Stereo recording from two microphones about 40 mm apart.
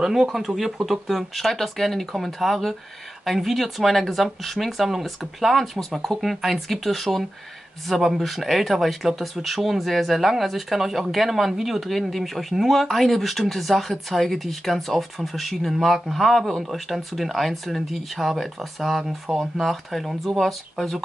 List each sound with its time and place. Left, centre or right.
0.0 s speech: centre
20.8 s speech: centre